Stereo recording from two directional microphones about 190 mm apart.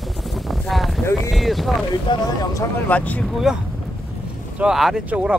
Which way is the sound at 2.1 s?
25° left (ahead or behind).